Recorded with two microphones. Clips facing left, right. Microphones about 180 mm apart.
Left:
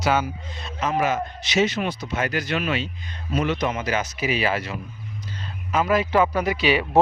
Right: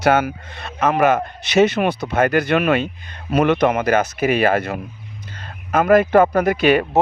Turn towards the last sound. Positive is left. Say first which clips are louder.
# right 6 dB
turn(degrees=-50)  # may be behind; listen again after turning